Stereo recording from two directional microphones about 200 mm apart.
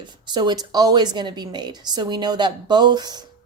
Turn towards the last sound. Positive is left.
turn(degrees=-20)  # may be behind; listen again after turning